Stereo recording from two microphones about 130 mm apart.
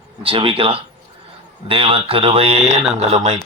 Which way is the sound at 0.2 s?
45° right (ahead or behind).